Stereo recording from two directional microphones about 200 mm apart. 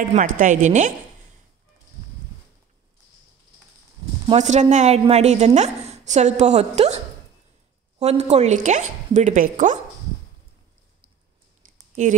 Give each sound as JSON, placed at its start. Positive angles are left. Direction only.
{"t": 0.0, "sound": "speech", "side_deg": -40}
{"t": 4.3, "sound": "speech", "side_deg": -35}
{"t": 8.0, "sound": "speech", "side_deg": -30}
{"t": 11.9, "sound": "speech", "side_deg": -35}